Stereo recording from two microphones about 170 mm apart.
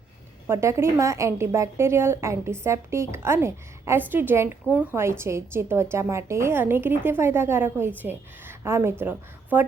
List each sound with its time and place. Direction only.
0.4 s a woman's voice: 15° right (ahead or behind)